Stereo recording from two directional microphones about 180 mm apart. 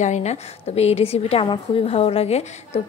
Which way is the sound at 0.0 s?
40° left (ahead or behind).